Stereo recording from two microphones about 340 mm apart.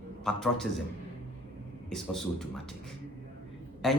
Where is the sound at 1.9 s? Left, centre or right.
Centre.